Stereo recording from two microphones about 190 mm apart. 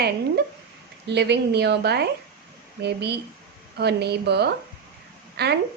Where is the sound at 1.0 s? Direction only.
60° right (ahead or behind).